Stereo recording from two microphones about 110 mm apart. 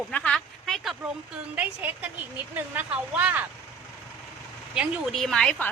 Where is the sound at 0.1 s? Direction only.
10° left (ahead or behind).